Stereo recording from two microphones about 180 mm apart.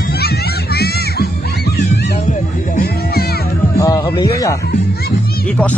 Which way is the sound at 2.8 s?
60° left (ahead or behind).